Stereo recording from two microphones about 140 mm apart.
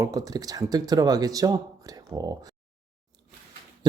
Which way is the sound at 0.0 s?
25° right (ahead or behind).